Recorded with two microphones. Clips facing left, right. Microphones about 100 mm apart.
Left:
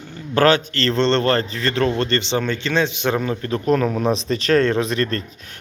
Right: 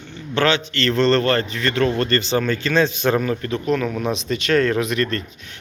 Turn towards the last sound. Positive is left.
turn(degrees=35)  # may be behind; listen again after turning